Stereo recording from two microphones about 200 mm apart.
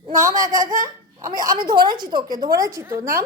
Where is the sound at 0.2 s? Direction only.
15° right (ahead or behind).